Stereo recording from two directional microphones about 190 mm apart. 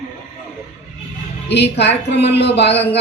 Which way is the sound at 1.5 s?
65° left (ahead or behind).